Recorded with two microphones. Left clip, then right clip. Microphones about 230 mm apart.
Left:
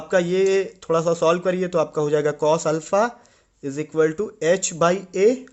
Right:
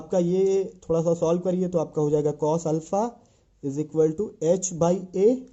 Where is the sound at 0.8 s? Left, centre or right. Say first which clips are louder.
Left 5 dB; left.